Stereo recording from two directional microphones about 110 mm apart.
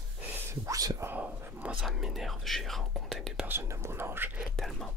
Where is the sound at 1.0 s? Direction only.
15° right (ahead or behind).